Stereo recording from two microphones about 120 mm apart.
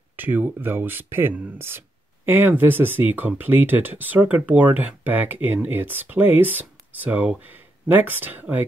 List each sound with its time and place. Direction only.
0.1 s speech: 15° right (ahead or behind)